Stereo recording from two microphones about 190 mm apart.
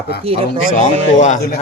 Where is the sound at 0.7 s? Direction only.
40° left (ahead or behind).